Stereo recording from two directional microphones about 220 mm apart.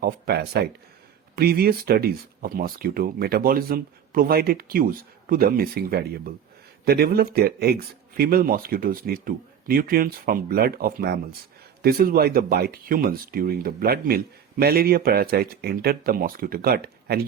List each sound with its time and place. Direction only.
0.0 s speech: 45° right (ahead or behind)